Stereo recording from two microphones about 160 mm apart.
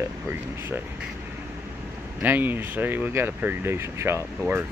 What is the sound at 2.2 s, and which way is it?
Speech, 10° right (ahead or behind).